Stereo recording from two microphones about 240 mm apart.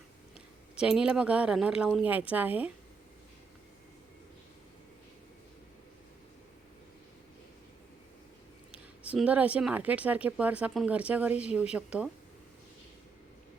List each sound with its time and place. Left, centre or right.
0.8 s speech: centre
8.7 s speech: centre